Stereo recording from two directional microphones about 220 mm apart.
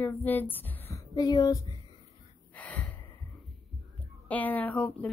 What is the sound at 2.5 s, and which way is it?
Gasp, 5° left (ahead or behind).